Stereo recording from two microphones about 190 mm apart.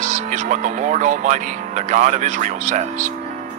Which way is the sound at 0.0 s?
40° right (ahead or behind).